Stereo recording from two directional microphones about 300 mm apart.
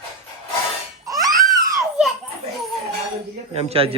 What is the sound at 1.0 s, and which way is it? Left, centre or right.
Crying, centre.